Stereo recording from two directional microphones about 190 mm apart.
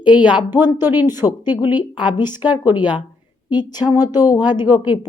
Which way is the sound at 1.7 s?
25° left (ahead or behind).